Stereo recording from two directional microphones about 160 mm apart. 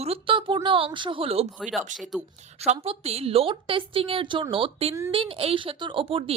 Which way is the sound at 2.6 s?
40° right (ahead or behind).